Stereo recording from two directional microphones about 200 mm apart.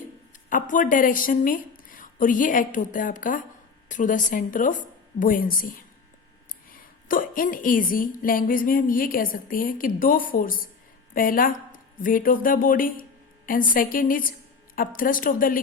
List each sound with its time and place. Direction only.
0.5 s a woman's voice: 40° left (ahead or behind)